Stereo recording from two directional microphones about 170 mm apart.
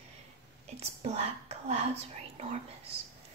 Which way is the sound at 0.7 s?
40° right (ahead or behind).